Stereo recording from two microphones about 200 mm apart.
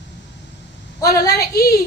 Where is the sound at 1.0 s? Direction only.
15° left (ahead or behind).